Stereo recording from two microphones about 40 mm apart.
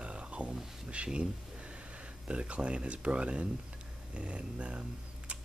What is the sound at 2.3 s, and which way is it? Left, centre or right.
Speech, right.